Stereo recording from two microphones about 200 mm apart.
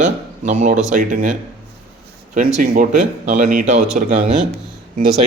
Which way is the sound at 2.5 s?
45° right (ahead or behind).